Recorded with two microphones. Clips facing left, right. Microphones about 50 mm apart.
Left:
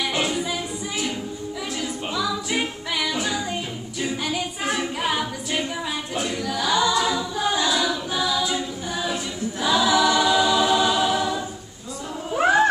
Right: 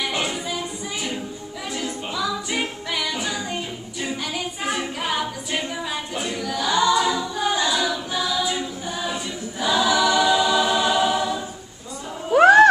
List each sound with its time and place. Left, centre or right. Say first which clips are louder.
0.0 s music: left 1 dB; centre
1.8 s music: right 1 dB; centre
4.0 s a capella: left 2 dB; centre
6.1 s choir: left 1 dB; centre
12.4 s music: right 7 dB; right